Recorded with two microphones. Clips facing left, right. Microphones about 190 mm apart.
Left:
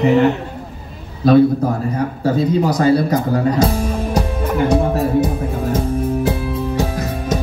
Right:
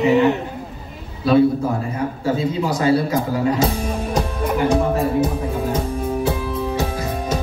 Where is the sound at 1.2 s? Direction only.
40° left (ahead or behind).